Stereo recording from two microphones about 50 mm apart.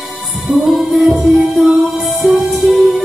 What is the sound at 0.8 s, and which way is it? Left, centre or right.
Music, right.